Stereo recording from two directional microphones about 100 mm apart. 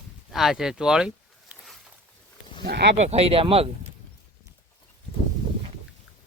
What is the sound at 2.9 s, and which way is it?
Speech, 90° right.